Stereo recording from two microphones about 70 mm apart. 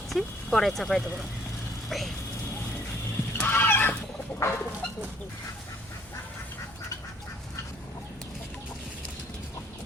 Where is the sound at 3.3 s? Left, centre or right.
Left.